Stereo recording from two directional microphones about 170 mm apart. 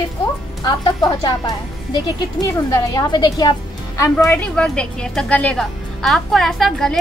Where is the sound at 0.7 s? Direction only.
25° left (ahead or behind).